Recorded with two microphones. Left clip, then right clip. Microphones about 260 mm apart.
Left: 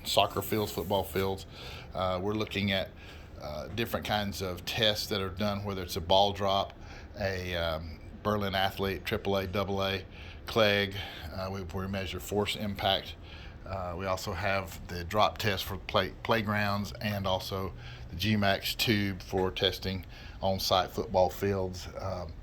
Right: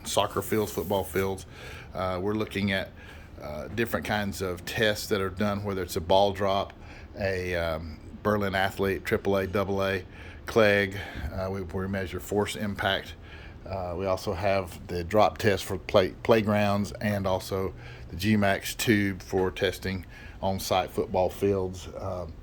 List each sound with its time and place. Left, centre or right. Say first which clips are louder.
0.1 s speech: right 1 dB; centre